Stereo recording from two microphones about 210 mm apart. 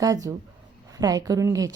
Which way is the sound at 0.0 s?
15° right (ahead or behind).